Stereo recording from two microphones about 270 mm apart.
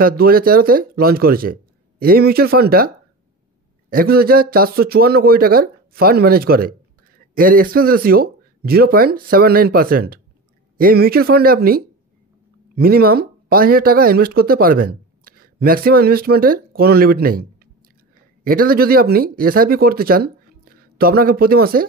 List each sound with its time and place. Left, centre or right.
0.0 s speech: right
3.9 s speech: right